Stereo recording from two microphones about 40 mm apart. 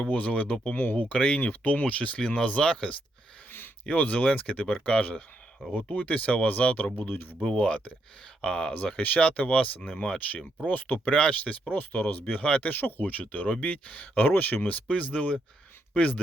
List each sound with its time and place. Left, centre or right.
0.0 s speech: left
0.8 s speech: left
3.8 s speech: left
5.7 s speech: left
7.1 s speech: left
7.4 s speech: left
9.0 s speech: left
9.9 s speech: left
10.7 s speech: left
11.1 s speech: left
12.6 s speech: left